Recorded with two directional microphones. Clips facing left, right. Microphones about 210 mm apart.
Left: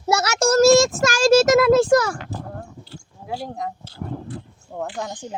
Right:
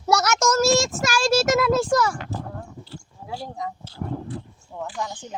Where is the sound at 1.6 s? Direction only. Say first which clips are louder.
Left 5 dB; 90° left.